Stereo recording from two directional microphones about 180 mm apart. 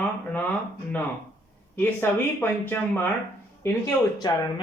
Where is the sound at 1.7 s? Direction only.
10° left (ahead or behind).